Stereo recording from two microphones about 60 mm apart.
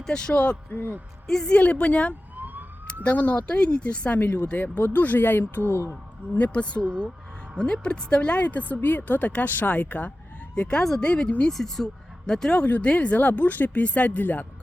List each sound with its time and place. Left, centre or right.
0.0 s speech: centre
0.7 s speech: left
1.3 s speech: centre
1.5 s speech: left
2.3 s emergency vehicle: right
3.0 s speech: left
4.2 s speech: left
5.9 s speech: left
11.5 s speech: centre
12.5 s speech: left